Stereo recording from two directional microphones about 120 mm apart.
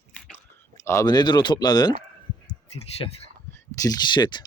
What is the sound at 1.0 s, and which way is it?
Speech, 40° left (ahead or behind).